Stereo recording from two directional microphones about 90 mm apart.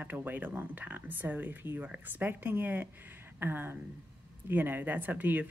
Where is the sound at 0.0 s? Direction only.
20° right (ahead or behind).